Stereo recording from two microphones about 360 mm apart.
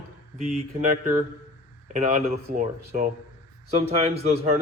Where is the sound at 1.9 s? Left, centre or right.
Centre.